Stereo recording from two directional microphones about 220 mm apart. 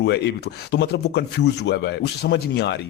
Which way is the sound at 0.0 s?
50° left (ahead or behind).